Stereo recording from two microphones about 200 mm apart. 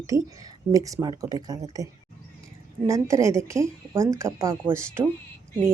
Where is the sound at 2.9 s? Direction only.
15° right (ahead or behind).